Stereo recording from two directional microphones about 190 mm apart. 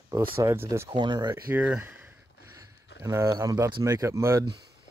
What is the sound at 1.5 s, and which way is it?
Speech, 10° right (ahead or behind).